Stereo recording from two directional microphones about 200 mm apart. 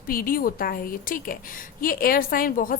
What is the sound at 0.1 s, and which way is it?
A woman's voice, 45° left (ahead or behind).